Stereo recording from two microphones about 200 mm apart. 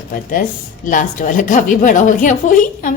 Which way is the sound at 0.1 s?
45° left (ahead or behind).